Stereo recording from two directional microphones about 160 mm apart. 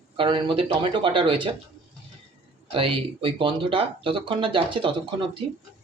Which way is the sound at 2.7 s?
35° right (ahead or behind).